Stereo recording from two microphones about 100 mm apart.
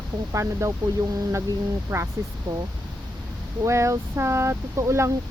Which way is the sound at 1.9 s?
35° right (ahead or behind).